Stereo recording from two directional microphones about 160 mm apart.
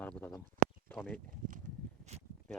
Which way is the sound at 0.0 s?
5° left (ahead or behind).